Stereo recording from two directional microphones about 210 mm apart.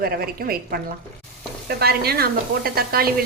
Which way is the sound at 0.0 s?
45° right (ahead or behind).